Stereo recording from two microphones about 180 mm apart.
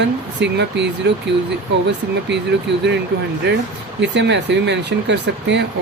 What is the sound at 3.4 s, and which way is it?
Speech, 80° right.